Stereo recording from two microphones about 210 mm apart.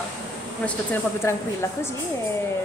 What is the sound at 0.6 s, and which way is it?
Speech, 10° left (ahead or behind).